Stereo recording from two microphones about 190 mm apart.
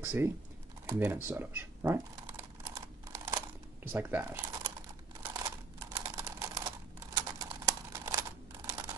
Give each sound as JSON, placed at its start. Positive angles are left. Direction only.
{"t": 0.0, "sound": "speech", "side_deg": -10}
{"t": 0.8, "sound": "shuffling cards", "side_deg": -10}
{"t": 3.3, "sound": "a sound", "side_deg": -10}